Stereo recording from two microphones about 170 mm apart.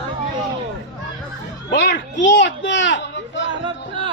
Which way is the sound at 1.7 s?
90° left.